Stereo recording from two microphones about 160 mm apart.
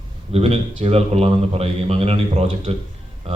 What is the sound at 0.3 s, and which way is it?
A man's voice, 40° right (ahead or behind).